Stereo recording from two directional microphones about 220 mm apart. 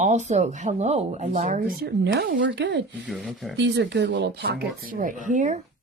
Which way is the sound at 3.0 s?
Centre (ahead or behind).